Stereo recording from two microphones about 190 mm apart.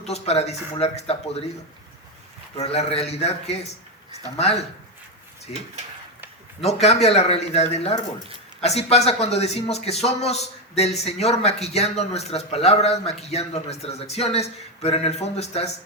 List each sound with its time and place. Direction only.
0.0 s a man's voice: 35° left (ahead or behind)
2.6 s a man's voice: 35° left (ahead or behind)
6.8 s a man's voice: 35° left (ahead or behind)